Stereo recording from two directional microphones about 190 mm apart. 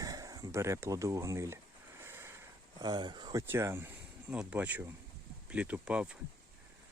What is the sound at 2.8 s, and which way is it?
Speech, 25° right (ahead or behind).